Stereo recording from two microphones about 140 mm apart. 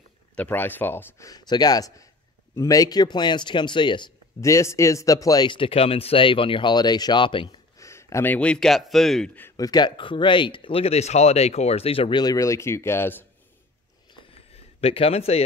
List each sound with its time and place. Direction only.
0.4 s speech: 15° left (ahead or behind)
1.3 s speech: 30° left (ahead or behind)
4.4 s speech: 20° left (ahead or behind); by 7.4 s 35° left (ahead or behind)
7.8 s a man's voice: 20° left (ahead or behind)
9.6 s speech: 30° left (ahead or behind)
14.5 s a man's voice: 45° left (ahead or behind)